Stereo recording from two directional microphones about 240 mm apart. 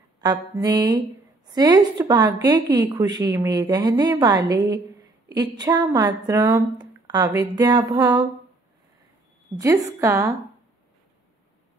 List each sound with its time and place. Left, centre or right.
0.2 s a woman's voice: centre
9.6 s a woman's voice: centre